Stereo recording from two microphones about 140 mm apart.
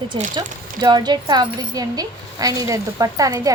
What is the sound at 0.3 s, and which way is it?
Speech, 30° right (ahead or behind).